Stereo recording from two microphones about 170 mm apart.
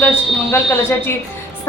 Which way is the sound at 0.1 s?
15° left (ahead or behind).